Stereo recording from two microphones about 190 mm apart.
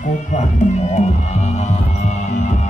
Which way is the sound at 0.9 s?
35° left (ahead or behind).